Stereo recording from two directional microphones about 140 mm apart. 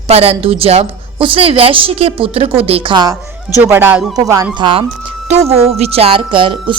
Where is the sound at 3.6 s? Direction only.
15° right (ahead or behind).